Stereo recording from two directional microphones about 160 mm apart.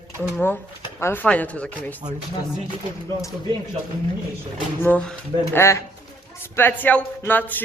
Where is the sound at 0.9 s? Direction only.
15° left (ahead or behind).